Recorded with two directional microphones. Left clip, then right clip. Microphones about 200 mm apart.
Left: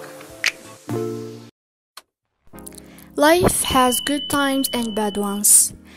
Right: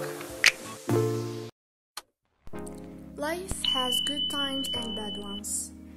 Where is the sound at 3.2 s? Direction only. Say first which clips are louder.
Left 17 dB; 45° left (ahead or behind).